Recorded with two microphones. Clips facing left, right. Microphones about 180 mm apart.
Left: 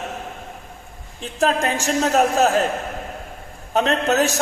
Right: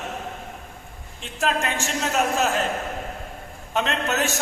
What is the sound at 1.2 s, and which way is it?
A man's voice, 40° left (ahead or behind).